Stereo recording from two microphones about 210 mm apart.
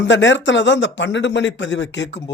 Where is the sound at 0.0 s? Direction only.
60° left (ahead or behind).